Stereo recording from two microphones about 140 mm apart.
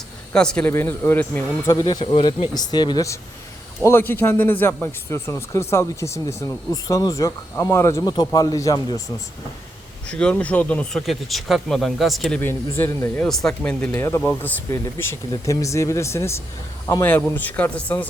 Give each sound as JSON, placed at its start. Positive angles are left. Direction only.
{"t": 0.3, "sound": "speech", "side_deg": 5}
{"t": 0.7, "sound": "speech", "side_deg": 15}
{"t": 3.8, "sound": "speech", "side_deg": 15}
{"t": 10.1, "sound": "speech", "side_deg": 5}
{"t": 11.0, "sound": "speech", "side_deg": 0}
{"t": 12.4, "sound": "speech", "side_deg": 15}
{"t": 13.2, "sound": "speech", "side_deg": 5}
{"t": 14.7, "sound": "speech", "side_deg": 20}